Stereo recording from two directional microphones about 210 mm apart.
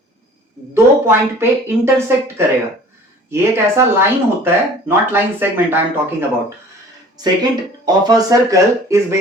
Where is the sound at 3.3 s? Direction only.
10° right (ahead or behind).